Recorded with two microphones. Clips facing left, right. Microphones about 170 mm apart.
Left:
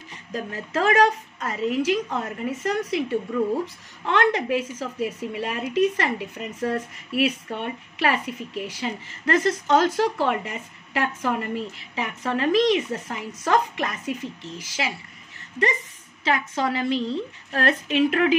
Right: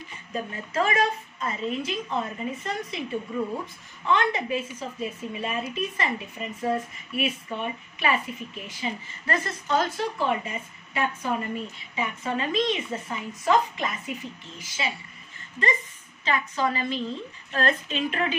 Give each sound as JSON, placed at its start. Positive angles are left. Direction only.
{"t": 0.3, "sound": "a woman's voice", "side_deg": 80}
{"t": 16.3, "sound": "a woman's voice", "side_deg": 80}